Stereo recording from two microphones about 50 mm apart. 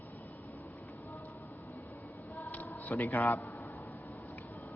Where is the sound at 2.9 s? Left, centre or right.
Left.